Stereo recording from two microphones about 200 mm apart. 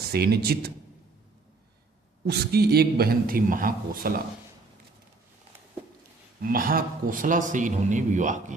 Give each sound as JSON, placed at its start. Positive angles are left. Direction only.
{"t": 0.1, "sound": "a man's voice", "side_deg": -50}
{"t": 2.2, "sound": "a man's voice", "side_deg": -55}
{"t": 6.4, "sound": "a man's voice", "side_deg": -45}